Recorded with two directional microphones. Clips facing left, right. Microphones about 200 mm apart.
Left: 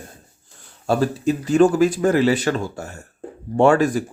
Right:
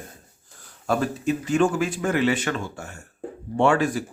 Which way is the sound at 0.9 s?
35° left (ahead or behind).